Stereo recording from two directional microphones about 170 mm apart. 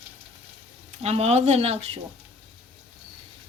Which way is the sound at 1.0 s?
40° right (ahead or behind).